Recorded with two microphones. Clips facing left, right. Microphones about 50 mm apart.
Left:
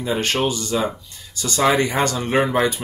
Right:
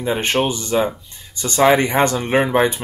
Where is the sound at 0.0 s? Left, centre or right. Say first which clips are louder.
Right 2 dB; right.